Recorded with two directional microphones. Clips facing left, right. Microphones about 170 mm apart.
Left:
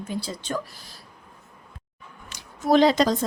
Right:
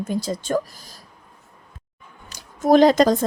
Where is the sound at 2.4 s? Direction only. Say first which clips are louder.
Right 4 dB; 45° right (ahead or behind).